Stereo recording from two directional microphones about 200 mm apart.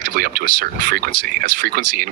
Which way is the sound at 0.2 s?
45° right (ahead or behind).